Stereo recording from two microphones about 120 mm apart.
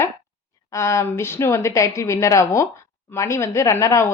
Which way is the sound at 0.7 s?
25° left (ahead or behind).